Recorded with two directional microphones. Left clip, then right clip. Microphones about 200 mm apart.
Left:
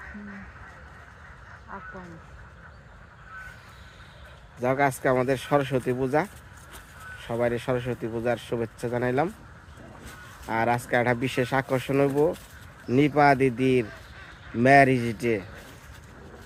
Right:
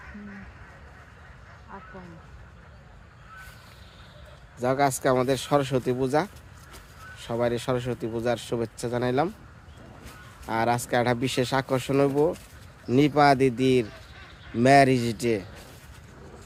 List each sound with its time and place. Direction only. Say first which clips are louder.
1.7 s speech: left 3 dB; 15° left (ahead or behind)
4.6 s speech: even; 5° right (ahead or behind)
7.3 s speech: even; 10° right (ahead or behind)
10.5 s speech: even; 5° right (ahead or behind)
14.9 s speech: right 1 dB; 20° right (ahead or behind)